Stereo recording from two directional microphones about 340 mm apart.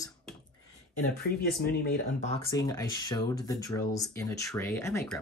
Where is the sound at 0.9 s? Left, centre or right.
Left.